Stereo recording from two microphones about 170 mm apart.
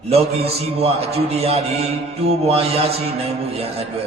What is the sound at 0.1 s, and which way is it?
A man's voice, 35° right (ahead or behind).